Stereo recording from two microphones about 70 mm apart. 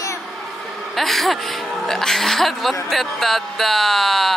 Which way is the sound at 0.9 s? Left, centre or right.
Centre.